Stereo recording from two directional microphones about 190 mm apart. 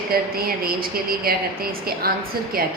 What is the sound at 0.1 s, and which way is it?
A woman's voice, 50° right (ahead or behind).